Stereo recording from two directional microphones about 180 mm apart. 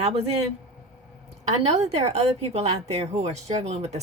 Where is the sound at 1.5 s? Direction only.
35° right (ahead or behind).